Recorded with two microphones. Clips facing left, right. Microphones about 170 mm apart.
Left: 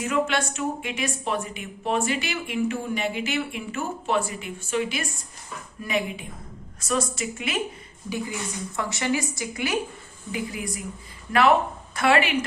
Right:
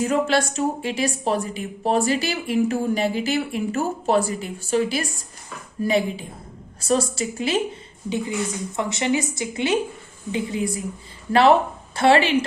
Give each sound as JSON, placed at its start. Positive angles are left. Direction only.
{"t": 0.0, "sound": "a woman's voice", "side_deg": -35}